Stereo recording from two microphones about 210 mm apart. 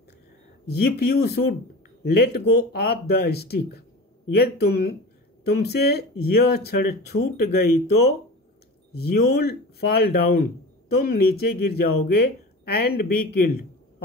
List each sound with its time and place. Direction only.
0.8 s speech: 50° left (ahead or behind)
9.1 s speech: 50° left (ahead or behind)